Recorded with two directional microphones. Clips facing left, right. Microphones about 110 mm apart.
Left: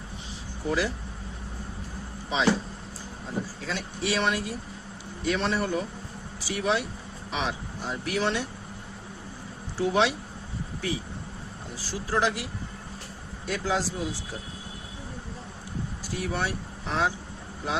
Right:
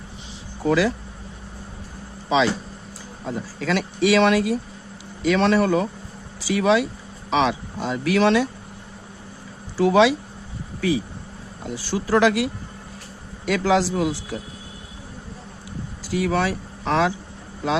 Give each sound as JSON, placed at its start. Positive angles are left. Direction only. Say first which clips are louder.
{"t": 0.6, "sound": "speech", "louder": "right 8 dB", "side_deg": -90}
{"t": 2.3, "sound": "speech", "louder": "right 5 dB", "side_deg": -90}
{"t": 9.7, "sound": "speech", "louder": "right 8 dB", "side_deg": -90}
{"t": 11.6, "sound": "speech", "louder": "right 10 dB", "side_deg": -80}
{"t": 16.0, "sound": "speech", "louder": "right 9 dB", "side_deg": -90}